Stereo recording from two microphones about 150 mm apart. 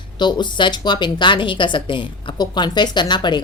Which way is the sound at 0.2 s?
30° left (ahead or behind).